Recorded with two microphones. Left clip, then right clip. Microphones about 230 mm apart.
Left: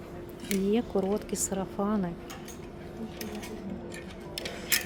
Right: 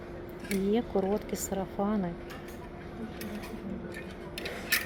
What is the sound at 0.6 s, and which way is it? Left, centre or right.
Speech, centre.